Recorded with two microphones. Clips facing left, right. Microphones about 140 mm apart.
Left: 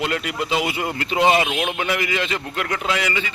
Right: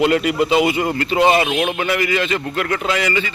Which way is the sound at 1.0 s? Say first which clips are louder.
Right 2 dB; 10° left (ahead or behind).